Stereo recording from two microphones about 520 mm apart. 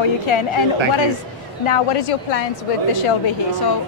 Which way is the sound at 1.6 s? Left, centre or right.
Left.